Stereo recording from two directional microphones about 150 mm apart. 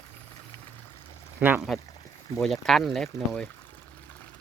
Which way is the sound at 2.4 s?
Centre (ahead or behind).